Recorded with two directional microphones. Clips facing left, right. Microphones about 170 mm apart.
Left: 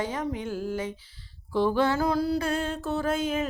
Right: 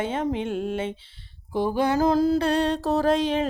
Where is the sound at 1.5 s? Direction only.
15° right (ahead or behind).